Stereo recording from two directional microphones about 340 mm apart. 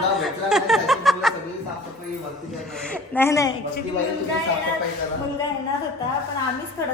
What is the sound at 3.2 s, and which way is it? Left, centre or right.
Speech, centre.